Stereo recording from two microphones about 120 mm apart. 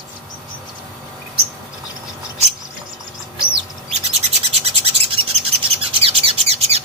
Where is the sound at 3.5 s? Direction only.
60° right (ahead or behind).